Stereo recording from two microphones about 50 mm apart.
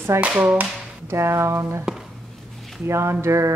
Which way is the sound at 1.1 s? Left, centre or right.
Right.